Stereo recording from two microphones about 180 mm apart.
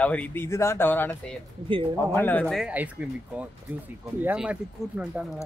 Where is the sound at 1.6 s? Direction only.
30° right (ahead or behind).